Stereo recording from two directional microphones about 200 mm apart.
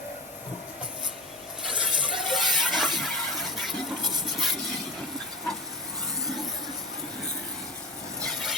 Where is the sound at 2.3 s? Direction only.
Centre (ahead or behind).